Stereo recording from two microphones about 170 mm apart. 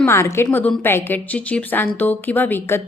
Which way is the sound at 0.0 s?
15° left (ahead or behind).